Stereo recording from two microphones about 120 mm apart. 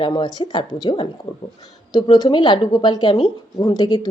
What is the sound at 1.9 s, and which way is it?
Speech, 35° left (ahead or behind).